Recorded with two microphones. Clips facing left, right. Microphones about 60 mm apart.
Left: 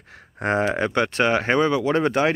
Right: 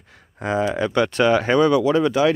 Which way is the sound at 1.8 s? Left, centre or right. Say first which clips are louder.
Right 3 dB; left.